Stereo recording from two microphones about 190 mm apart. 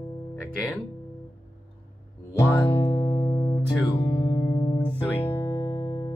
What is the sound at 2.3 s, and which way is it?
Music, 10° left (ahead or behind).